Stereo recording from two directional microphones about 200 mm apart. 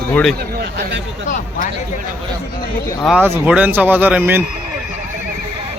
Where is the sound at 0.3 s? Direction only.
55° right (ahead or behind).